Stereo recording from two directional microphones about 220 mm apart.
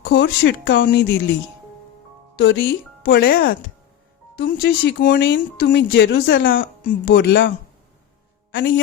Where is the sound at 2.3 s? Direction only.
50° left (ahead or behind).